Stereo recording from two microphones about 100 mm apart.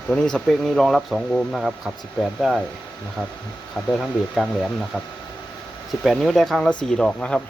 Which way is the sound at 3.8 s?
5° left (ahead or behind).